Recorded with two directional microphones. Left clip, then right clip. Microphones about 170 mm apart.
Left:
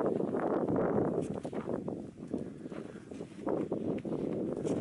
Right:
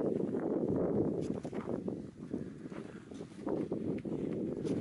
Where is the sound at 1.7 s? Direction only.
40° right (ahead or behind).